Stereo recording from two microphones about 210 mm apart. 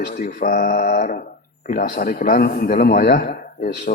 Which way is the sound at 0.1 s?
45° left (ahead or behind).